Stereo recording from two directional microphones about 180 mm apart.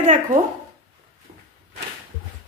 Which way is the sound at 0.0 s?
45° right (ahead or behind).